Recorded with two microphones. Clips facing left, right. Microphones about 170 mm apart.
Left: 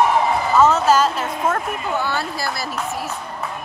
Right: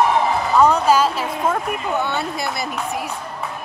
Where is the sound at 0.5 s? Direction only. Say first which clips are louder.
Even; 5° left (ahead or behind).